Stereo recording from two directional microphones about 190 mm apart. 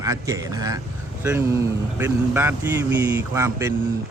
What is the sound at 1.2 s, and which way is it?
A man's voice, 10° right (ahead or behind).